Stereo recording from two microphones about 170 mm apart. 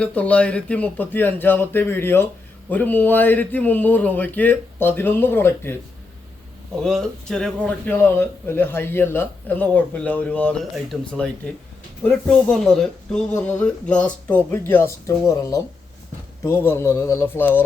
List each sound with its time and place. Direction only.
0.0 s speech: 10° left (ahead or behind)
6.8 s speech: centre (ahead or behind)